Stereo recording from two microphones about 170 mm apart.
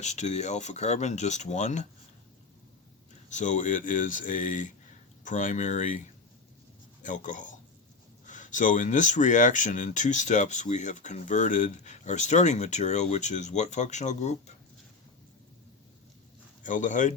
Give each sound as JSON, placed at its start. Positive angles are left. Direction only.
{"t": 0.0, "sound": "speech", "side_deg": 45}
{"t": 3.2, "sound": "speech", "side_deg": 45}
{"t": 16.6, "sound": "speech", "side_deg": 50}